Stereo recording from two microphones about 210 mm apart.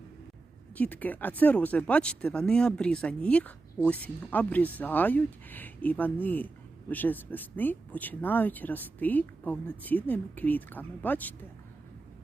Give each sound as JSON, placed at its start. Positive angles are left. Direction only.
{"t": 0.8, "sound": "speech", "side_deg": 10}